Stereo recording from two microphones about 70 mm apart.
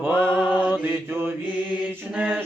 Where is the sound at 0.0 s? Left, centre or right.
Right.